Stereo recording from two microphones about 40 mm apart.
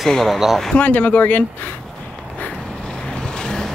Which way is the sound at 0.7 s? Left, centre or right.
Left.